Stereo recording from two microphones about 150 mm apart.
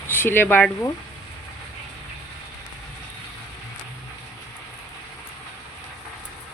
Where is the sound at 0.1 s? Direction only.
15° left (ahead or behind).